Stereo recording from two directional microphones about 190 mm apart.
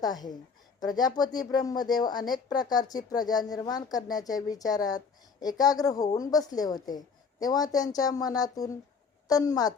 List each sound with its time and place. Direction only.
0.0 s a woman's voice: 20° left (ahead or behind)